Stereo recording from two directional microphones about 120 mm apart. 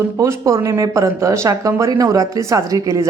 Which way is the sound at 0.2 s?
25° right (ahead or behind).